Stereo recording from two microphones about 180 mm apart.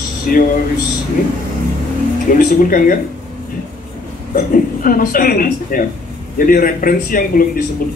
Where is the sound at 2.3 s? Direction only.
50° left (ahead or behind).